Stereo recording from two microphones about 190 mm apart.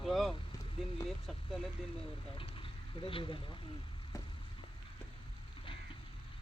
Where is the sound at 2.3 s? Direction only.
30° left (ahead or behind).